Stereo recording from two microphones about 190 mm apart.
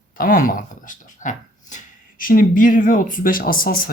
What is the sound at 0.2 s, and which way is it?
Speech, 50° left (ahead or behind).